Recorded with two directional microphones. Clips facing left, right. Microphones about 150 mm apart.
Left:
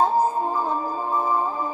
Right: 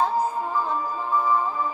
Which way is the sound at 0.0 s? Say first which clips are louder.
Left 3 dB; 35° left (ahead or behind).